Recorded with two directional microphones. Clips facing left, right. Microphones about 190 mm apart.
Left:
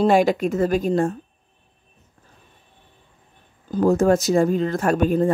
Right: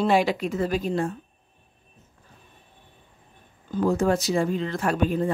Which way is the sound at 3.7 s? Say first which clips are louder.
Left 5 dB; 45° left (ahead or behind).